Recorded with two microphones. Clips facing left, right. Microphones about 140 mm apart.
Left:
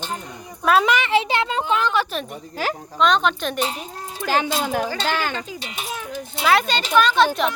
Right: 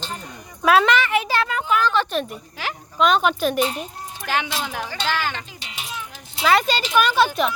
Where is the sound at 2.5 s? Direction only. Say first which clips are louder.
Left 6 dB; 40° left (ahead or behind).